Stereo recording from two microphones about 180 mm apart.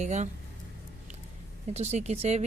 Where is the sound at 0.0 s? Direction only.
40° right (ahead or behind).